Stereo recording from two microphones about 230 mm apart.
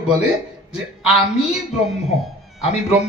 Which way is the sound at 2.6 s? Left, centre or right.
Left.